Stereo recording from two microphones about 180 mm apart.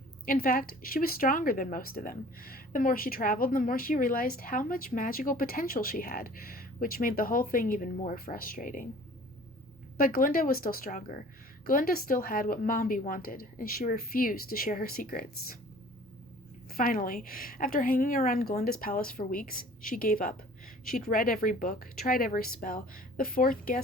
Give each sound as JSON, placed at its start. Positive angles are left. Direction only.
{"t": 0.3, "sound": "speech", "side_deg": 55}
{"t": 10.0, "sound": "speech", "side_deg": 50}
{"t": 16.7, "sound": "speech", "side_deg": 50}